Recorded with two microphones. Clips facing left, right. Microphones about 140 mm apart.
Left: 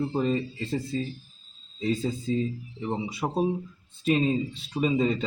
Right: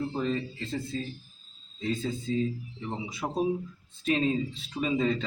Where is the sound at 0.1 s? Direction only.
30° left (ahead or behind).